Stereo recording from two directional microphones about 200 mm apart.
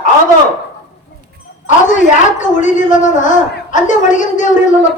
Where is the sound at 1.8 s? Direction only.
40° left (ahead or behind).